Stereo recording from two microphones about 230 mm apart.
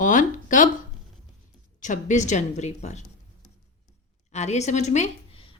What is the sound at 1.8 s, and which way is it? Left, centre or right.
A woman's voice, left.